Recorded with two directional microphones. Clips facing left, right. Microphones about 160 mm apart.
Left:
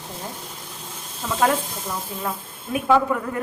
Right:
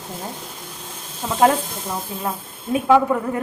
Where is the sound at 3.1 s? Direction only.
25° right (ahead or behind).